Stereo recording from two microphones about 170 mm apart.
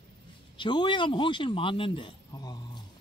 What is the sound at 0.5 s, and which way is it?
Speech, 25° left (ahead or behind).